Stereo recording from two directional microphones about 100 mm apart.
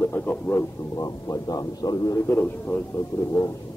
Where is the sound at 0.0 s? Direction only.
20° left (ahead or behind).